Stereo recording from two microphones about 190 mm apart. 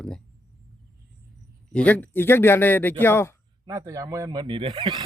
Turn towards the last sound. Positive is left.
turn(degrees=-25)  # may be behind; listen again after turning